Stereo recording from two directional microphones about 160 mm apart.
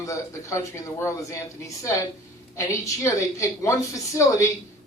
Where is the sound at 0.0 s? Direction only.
20° left (ahead or behind).